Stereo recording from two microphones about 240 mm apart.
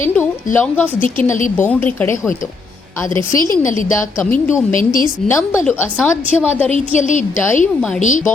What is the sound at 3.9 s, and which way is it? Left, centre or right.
Speech, centre.